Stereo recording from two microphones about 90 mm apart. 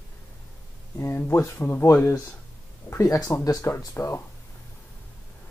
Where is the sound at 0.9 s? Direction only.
30° left (ahead or behind).